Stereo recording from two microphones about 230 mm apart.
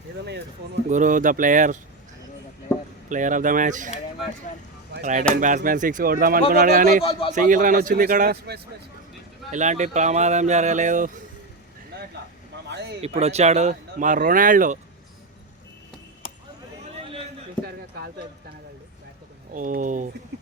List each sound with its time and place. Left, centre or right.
0.9 s speech: right
2.7 s a sound: centre
3.1 s speech: right
5.3 s speech: right
7.0 s a man's voice: left
7.3 s speech: right
9.5 s speech: right
12.6 s a sound: right
13.1 s speech: right
17.6 s a sound: centre
19.5 s speech: right